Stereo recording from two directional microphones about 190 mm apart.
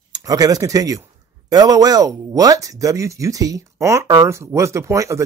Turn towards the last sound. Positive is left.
turn(degrees=-15)  # may be behind; listen again after turning